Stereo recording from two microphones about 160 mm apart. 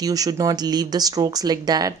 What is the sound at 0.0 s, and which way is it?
Speech, 25° right (ahead or behind).